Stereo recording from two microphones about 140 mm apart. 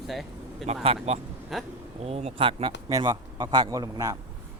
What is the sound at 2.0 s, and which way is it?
Speech, 50° right (ahead or behind).